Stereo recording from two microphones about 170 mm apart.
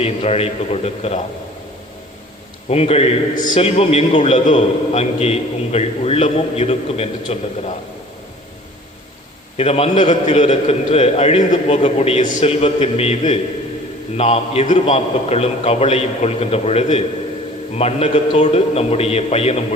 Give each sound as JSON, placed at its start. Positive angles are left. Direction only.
{"t": 0.0, "sound": "a man's voice", "side_deg": 35}
{"t": 2.6, "sound": "a man's voice", "side_deg": 35}
{"t": 3.3, "sound": "a man's voice", "side_deg": 50}
{"t": 3.6, "sound": "a man's voice", "side_deg": 35}
{"t": 9.6, "sound": "a man's voice", "side_deg": 35}